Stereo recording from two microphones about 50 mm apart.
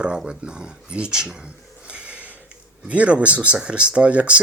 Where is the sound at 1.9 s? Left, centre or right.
Right.